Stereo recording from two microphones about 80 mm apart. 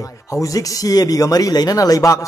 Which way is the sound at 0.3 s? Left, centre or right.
Left.